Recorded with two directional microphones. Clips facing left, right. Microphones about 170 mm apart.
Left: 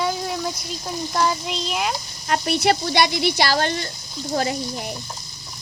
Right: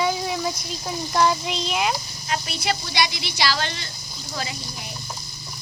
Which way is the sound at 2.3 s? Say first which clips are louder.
Left 7 dB; 60° left (ahead or behind).